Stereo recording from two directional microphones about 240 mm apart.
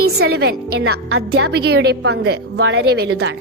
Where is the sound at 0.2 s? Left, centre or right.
Right.